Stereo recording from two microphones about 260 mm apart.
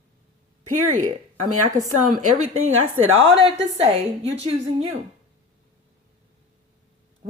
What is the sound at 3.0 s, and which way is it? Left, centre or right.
Speech, right.